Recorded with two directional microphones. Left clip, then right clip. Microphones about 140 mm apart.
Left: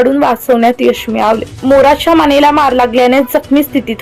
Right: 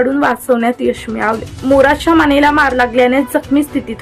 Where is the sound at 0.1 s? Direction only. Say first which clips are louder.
Left 3 dB; 5° left (ahead or behind).